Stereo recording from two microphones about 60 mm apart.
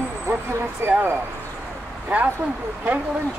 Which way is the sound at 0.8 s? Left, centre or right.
Right.